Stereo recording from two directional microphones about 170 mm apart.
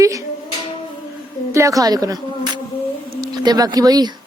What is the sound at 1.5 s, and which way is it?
A woman's voice, 20° right (ahead or behind).